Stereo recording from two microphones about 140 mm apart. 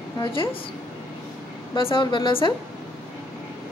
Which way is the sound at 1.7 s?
35° left (ahead or behind).